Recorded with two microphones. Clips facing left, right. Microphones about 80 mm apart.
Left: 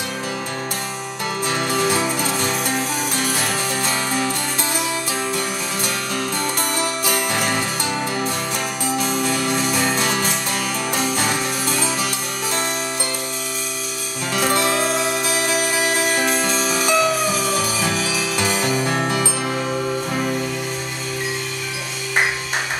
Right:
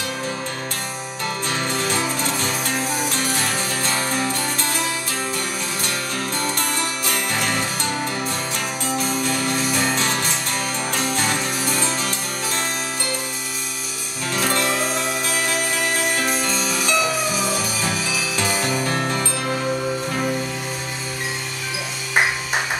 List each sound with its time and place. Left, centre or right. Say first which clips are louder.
1.5 s music: left 5 dB; centre
6.1 s music: left 1 dB; centre
9.0 s music: left 2 dB; centre
14.3 s music: left 3 dB; centre